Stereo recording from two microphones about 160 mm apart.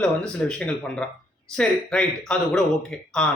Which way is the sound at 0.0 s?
5° left (ahead or behind).